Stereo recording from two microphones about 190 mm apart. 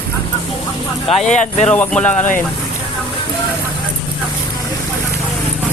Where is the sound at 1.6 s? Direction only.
5° left (ahead or behind).